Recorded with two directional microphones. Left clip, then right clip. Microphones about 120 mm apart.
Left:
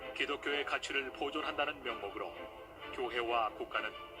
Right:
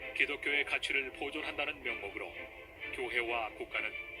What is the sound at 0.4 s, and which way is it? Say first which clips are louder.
A man's voice: right 3 dB; 35° right (ahead or behind).